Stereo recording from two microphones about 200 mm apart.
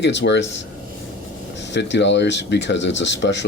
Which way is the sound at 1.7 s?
60° left (ahead or behind).